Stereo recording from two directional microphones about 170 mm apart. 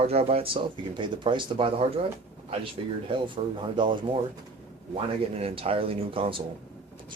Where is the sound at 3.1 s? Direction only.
30° right (ahead or behind).